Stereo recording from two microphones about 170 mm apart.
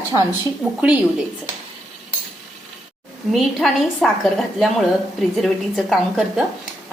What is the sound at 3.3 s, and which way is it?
A woman's voice, centre (ahead or behind).